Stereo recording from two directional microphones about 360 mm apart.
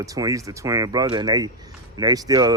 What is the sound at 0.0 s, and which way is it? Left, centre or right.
Speech, centre.